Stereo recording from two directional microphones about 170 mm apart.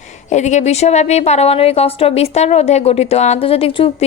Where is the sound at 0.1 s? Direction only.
45° left (ahead or behind).